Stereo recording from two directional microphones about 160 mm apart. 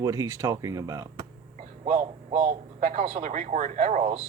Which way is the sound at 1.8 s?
50° right (ahead or behind).